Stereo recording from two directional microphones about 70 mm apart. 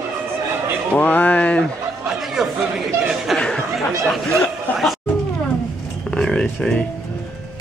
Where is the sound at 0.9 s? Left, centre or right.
Left.